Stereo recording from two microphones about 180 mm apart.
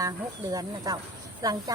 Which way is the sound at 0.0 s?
20° right (ahead or behind).